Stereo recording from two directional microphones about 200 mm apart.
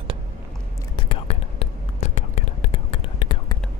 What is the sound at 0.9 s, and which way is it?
Whispering, 30° left (ahead or behind).